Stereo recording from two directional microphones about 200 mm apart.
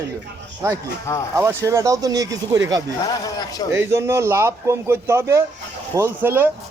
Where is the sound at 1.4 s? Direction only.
15° right (ahead or behind).